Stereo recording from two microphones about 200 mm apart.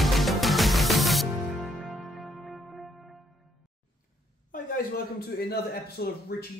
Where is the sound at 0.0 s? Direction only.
Centre (ahead or behind).